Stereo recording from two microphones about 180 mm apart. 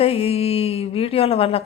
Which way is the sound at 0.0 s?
35° left (ahead or behind).